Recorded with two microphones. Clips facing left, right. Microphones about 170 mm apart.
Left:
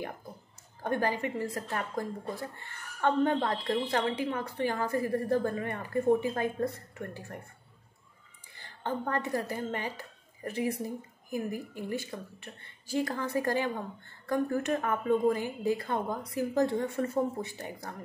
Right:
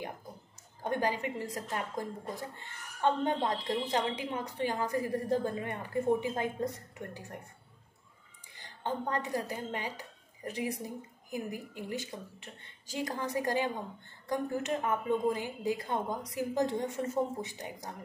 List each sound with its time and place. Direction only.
0.8 s a woman's voice: 15° right (ahead or behind)
8.5 s a woman's voice: 15° right (ahead or behind)